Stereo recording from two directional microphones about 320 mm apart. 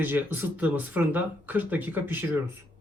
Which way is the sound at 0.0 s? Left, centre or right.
Centre.